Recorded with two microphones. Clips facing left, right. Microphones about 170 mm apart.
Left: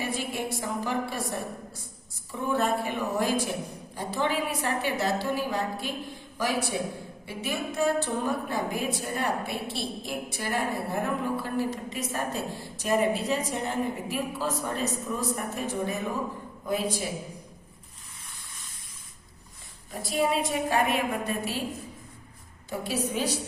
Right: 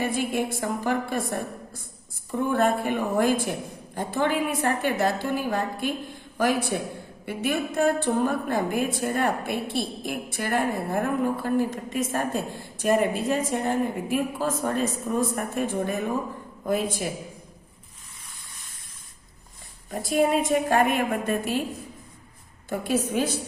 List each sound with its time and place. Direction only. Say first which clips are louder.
0.0 s a sound: right 5 dB; 50° right (ahead or behind)
2.3 s a woman's voice: right 4 dB; 55° right (ahead or behind)
19.9 s a woman's voice: right 5 dB; 50° right (ahead or behind)
22.7 s a woman's voice: right 5 dB; 50° right (ahead or behind)